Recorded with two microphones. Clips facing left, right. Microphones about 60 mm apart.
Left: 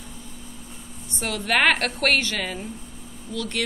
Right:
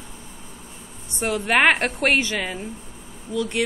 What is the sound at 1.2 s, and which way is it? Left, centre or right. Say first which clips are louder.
A woman's voice: right 3 dB; right.